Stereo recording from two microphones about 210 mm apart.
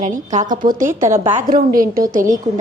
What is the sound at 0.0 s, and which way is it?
A woman's voice, 35° right (ahead or behind).